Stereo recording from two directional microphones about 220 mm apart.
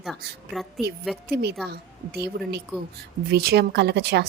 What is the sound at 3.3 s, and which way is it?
Speech, 45° right (ahead or behind).